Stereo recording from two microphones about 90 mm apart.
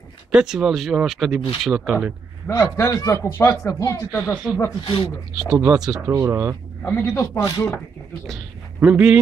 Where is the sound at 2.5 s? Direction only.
40° left (ahead or behind).